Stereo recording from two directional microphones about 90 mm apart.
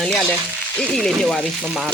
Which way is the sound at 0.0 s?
5° left (ahead or behind).